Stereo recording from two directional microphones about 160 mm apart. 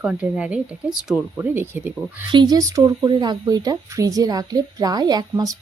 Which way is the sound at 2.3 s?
25° right (ahead or behind).